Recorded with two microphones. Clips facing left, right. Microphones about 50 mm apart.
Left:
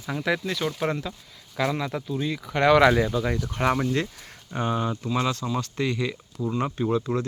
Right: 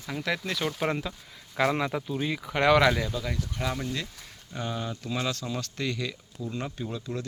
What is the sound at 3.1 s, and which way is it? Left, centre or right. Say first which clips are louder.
Speech: left 7 dB; left.